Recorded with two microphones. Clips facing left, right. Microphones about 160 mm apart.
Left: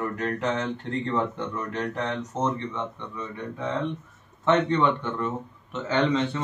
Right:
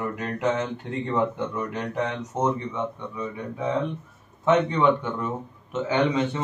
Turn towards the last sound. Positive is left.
turn(degrees=-10)  # may be behind; listen again after turning